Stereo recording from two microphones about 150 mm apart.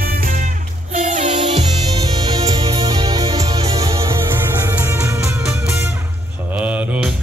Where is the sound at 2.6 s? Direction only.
40° right (ahead or behind).